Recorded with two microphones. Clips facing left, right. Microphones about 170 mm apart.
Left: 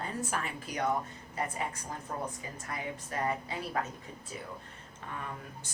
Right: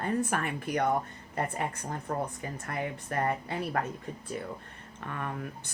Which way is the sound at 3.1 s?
55° right (ahead or behind).